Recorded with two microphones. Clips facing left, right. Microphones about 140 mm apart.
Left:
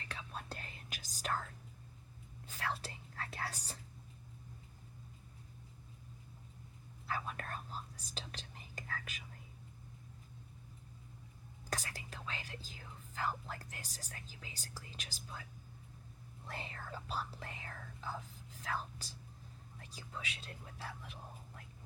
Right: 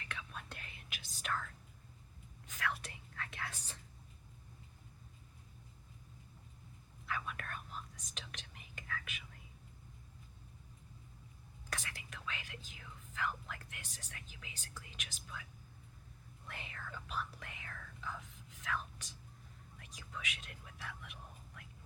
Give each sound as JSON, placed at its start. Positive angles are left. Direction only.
{"t": 0.0, "sound": "whispering", "side_deg": 35}
{"t": 2.5, "sound": "whispering", "side_deg": 30}
{"t": 7.1, "sound": "whispering", "side_deg": 35}
{"t": 11.7, "sound": "whispering", "side_deg": 35}
{"t": 16.5, "sound": "speech", "side_deg": 35}